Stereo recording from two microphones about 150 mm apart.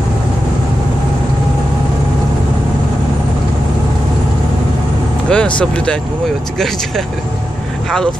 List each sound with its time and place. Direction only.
5.3 s speech: 5° left (ahead or behind)